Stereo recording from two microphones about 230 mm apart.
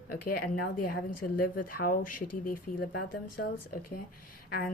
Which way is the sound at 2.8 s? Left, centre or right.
Left.